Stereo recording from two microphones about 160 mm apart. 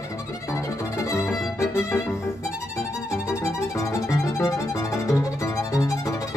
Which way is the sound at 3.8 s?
20° left (ahead or behind).